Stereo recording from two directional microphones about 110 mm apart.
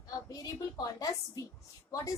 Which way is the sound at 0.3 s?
35° left (ahead or behind).